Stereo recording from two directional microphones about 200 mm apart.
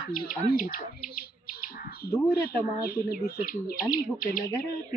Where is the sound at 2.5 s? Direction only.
50° left (ahead or behind).